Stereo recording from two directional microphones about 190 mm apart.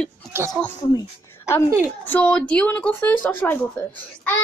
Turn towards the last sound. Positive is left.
turn(degrees=10)  # may be behind; listen again after turning